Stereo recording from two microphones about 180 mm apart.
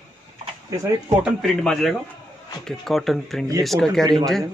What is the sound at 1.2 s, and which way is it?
Speech, centre (ahead or behind).